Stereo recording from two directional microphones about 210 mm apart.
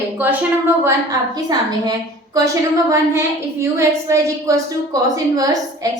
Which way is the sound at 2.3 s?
15° right (ahead or behind).